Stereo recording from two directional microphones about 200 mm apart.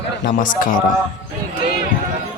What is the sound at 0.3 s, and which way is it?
Speech, 40° left (ahead or behind).